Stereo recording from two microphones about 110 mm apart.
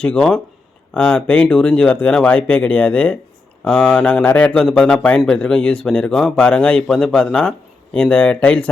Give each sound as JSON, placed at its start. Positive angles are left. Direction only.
{"t": 0.0, "sound": "a man's voice", "side_deg": 5}